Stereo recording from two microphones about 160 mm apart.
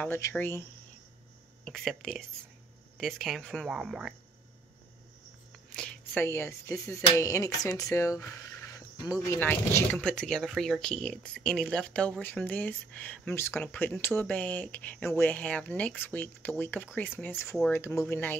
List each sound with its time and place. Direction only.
0.0 s speech: 15° left (ahead or behind)
1.6 s speech: centre (ahead or behind)
5.7 s speech: 10° left (ahead or behind)